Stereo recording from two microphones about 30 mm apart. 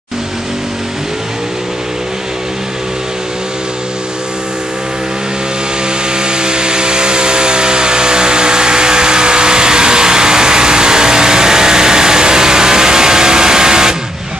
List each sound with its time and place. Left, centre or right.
6.1 s vehicle: right